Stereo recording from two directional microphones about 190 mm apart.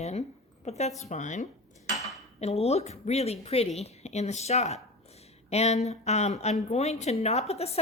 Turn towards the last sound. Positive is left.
turn(degrees=35)  # may be behind; listen again after turning